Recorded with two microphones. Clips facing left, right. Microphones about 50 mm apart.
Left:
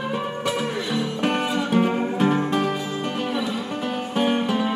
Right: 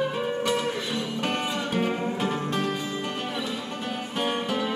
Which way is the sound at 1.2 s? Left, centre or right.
Centre.